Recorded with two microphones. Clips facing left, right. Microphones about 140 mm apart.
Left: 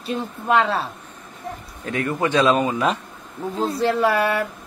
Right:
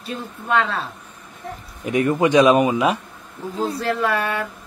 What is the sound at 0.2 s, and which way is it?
Speech, 30° left (ahead or behind).